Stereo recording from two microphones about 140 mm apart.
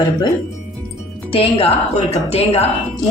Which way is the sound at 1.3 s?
45° left (ahead or behind).